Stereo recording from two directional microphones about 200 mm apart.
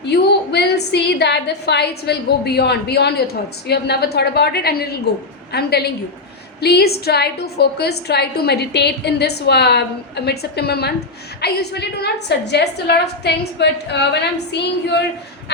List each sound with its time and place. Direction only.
0.1 s a woman's voice: 55° left (ahead or behind)